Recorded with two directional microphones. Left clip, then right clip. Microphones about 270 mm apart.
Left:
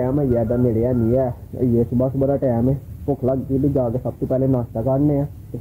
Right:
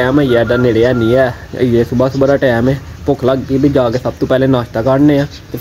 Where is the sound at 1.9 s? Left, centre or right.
Right.